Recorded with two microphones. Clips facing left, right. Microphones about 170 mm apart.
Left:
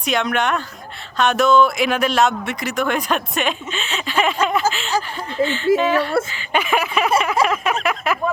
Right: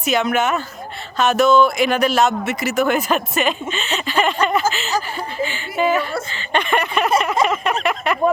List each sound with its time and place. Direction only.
0.0 s speech: 5° right (ahead or behind)
5.7 s speech: 40° left (ahead or behind)
6.3 s a sound: 5° left (ahead or behind)